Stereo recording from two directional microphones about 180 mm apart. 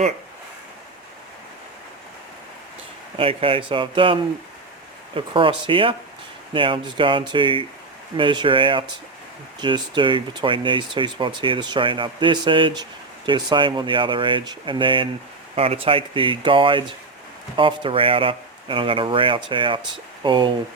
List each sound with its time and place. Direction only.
3.2 s speech: 30° right (ahead or behind)